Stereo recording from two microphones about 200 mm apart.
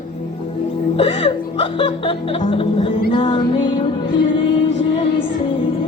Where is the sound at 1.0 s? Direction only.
30° left (ahead or behind).